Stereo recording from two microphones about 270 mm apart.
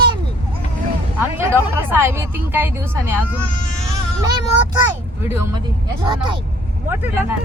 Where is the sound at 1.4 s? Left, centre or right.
Centre.